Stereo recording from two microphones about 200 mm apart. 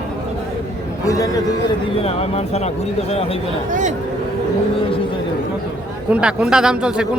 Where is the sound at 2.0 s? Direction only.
30° left (ahead or behind).